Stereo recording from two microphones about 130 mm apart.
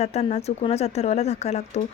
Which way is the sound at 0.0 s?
55° left (ahead or behind).